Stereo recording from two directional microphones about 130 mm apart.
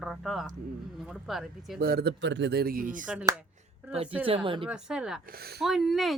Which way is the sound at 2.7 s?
90° right.